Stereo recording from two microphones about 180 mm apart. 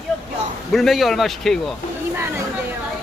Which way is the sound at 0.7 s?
Centre (ahead or behind).